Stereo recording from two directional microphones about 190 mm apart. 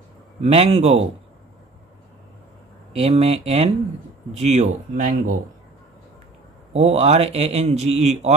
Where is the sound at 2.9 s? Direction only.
30° right (ahead or behind).